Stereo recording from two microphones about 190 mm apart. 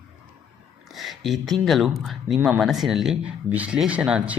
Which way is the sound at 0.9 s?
Centre (ahead or behind).